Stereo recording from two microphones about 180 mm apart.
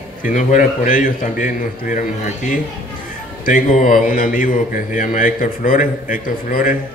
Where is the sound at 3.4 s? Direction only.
50° left (ahead or behind).